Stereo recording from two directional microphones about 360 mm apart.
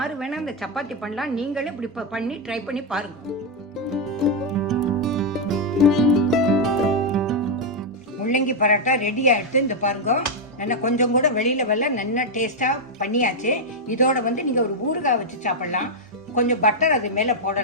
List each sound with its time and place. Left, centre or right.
0.0 s a woman's voice: centre
3.8 s music: centre
8.2 s a woman's voice: left